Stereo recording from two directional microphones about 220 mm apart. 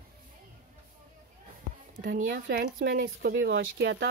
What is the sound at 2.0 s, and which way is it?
Speech, 40° right (ahead or behind).